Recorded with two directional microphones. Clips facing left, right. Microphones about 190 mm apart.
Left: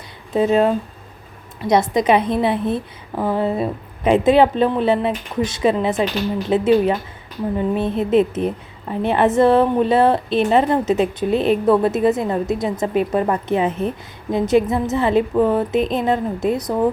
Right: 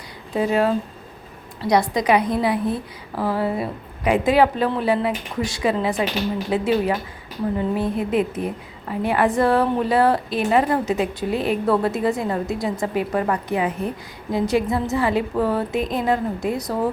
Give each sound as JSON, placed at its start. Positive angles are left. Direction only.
{"t": 0.3, "sound": "a woman's voice", "side_deg": 20}